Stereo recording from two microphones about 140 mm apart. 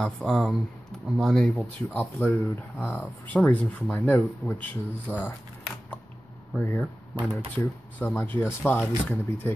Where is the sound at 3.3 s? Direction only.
10° left (ahead or behind).